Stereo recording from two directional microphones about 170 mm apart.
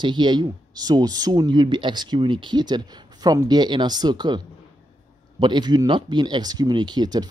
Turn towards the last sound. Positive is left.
turn(degrees=-25)  # may be behind; listen again after turning